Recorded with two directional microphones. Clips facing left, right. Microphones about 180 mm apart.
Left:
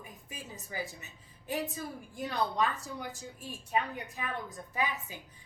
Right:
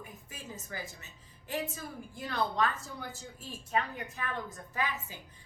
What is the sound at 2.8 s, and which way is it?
A woman's voice, 15° left (ahead or behind).